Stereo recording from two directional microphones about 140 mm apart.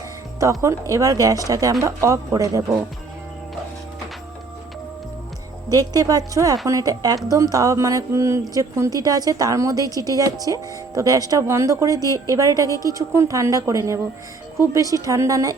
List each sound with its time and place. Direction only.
0.6 s speech: 20° right (ahead or behind)
5.6 s speech: 25° right (ahead or behind)